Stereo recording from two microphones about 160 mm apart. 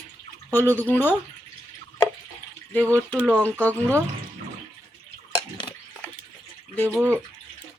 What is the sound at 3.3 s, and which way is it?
Speech, 10° left (ahead or behind).